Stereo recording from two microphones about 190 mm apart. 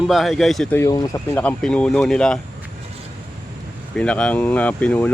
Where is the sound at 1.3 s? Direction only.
5° left (ahead or behind).